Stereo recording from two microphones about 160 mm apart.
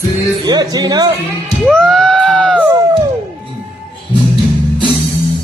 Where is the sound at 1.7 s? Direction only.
5° left (ahead or behind).